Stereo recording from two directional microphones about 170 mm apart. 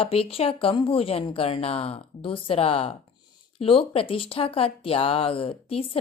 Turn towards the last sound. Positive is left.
turn(degrees=35)  # may be behind; listen again after turning